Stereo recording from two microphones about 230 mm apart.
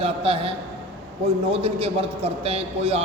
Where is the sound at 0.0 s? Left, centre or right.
Right.